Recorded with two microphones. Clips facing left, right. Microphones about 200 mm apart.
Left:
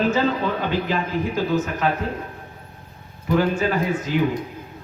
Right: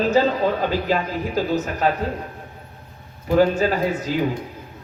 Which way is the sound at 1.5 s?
35° right (ahead or behind).